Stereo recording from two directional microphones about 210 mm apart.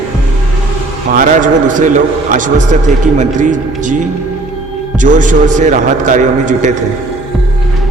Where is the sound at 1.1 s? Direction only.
40° right (ahead or behind).